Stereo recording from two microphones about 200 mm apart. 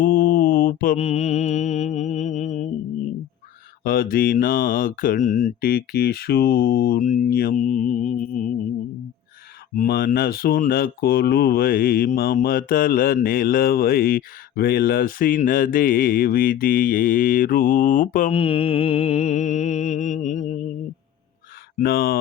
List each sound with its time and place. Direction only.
0.0 s mantra: 45° left (ahead or behind)
3.8 s speech: 45° left (ahead or behind)
9.7 s speech: 45° left (ahead or behind)
18.3 s mantra: 30° left (ahead or behind)
21.8 s speech: 50° left (ahead or behind)